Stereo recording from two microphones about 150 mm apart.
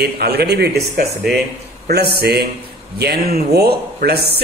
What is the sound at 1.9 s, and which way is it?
A man's voice, 90° right.